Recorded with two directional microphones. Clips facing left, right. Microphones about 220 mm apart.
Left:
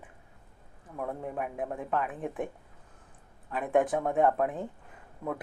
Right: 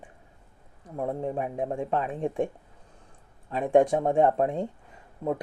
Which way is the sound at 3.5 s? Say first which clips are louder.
Right 5 dB; 25° right (ahead or behind).